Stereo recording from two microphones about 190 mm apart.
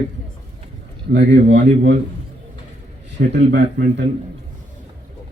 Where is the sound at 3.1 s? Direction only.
65° right (ahead or behind).